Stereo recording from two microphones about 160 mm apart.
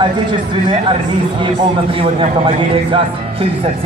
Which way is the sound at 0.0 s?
30° right (ahead or behind).